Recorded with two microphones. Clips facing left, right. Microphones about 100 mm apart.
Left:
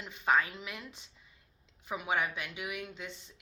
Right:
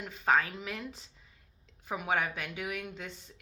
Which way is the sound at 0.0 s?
40° right (ahead or behind).